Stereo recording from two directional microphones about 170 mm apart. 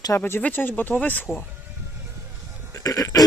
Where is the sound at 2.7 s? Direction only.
20° left (ahead or behind).